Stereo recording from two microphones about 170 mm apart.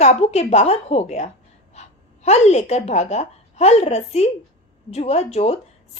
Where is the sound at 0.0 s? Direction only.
40° left (ahead or behind).